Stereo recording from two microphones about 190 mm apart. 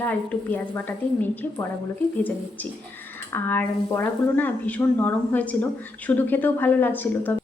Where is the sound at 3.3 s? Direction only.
10° left (ahead or behind).